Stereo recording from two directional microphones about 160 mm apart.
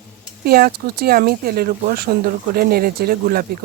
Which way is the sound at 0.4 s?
70° right (ahead or behind).